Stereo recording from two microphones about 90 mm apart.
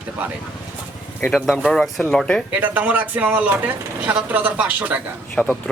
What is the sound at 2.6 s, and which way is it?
Speech, 20° right (ahead or behind).